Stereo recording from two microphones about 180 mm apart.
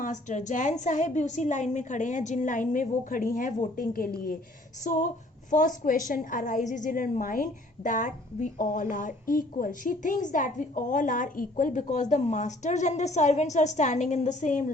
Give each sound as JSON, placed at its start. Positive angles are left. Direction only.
{"t": 0.0, "sound": "a woman's voice", "side_deg": 45}